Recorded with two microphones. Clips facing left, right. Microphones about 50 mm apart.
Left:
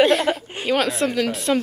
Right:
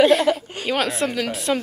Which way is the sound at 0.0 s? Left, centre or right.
Centre.